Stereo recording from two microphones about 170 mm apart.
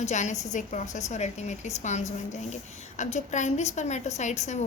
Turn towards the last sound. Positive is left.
turn(degrees=45)  # may be behind; listen again after turning